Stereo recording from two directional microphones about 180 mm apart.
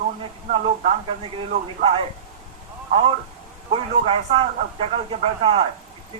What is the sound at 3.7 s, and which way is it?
Speech, 30° right (ahead or behind).